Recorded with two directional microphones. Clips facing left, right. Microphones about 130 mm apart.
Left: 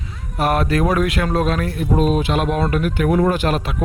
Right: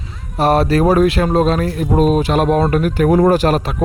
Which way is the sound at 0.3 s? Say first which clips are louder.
Right 5 dB; 35° right (ahead or behind).